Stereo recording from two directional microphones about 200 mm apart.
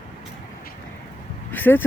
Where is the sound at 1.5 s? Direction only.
10° left (ahead or behind).